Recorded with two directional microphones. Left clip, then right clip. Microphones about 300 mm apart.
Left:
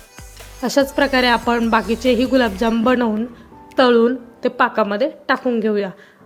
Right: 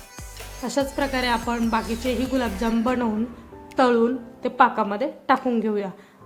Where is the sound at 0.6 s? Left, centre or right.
Centre.